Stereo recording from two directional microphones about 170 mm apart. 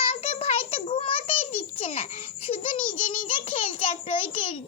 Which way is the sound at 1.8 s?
35° left (ahead or behind).